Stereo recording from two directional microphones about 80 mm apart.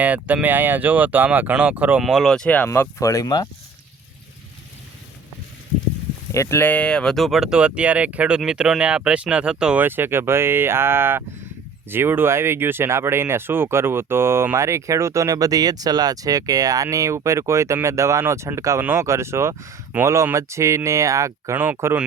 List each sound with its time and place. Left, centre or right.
0.0 s speech: centre
2.0 s speech: centre
2.3 s speech: centre
2.6 s speech: left
3.0 s speech: left
3.2 s speech: left
6.3 s speech: left
6.6 s speech: left; by 9.7 s centre
9.7 s speech: right
19.9 s speech: centre
20.3 s speech: right
21.5 s speech: right